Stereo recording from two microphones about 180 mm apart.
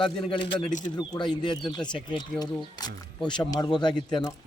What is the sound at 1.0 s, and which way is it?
Speech, 25° left (ahead or behind).